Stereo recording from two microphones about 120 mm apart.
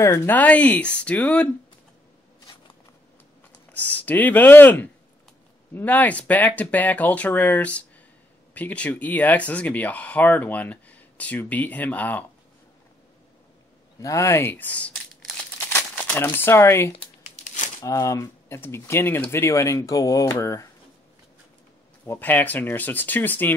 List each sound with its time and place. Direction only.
0.0 s speech: 25° left (ahead or behind)
0.4 s speech: 10° left (ahead or behind)
3.7 s speech: 15° left (ahead or behind)
14.0 s speech: 25° left (ahead or behind)
22.0 s speech: 20° left (ahead or behind)